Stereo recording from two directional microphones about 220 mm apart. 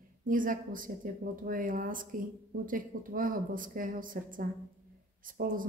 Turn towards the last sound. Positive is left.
turn(degrees=-40)  # may be behind; listen again after turning